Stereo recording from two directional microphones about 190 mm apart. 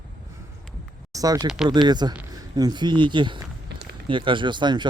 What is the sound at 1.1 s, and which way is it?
Speech, 20° right (ahead or behind).